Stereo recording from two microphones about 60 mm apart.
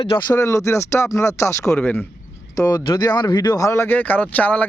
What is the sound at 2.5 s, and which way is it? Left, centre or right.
Speech, left.